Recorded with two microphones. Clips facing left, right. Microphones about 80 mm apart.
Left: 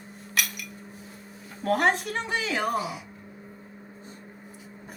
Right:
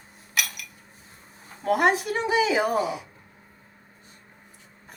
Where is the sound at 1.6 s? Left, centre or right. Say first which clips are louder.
Right 2 dB; centre.